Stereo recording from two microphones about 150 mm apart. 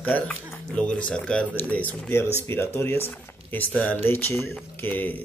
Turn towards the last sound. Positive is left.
turn(degrees=10)  # may be behind; listen again after turning